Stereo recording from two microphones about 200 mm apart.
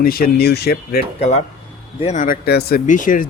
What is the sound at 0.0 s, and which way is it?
Speech, 50° left (ahead or behind).